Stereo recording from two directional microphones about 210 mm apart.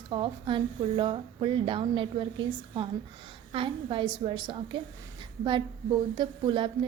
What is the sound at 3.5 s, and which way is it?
A woman's voice, 25° right (ahead or behind).